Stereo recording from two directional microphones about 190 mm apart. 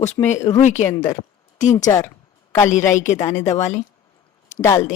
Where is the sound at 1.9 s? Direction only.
15° left (ahead or behind).